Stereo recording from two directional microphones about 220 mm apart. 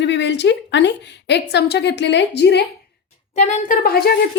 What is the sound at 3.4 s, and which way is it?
Speech, 35° left (ahead or behind).